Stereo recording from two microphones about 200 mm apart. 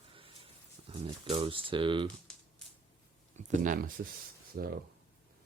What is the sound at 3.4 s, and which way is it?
Speech, 40° right (ahead or behind).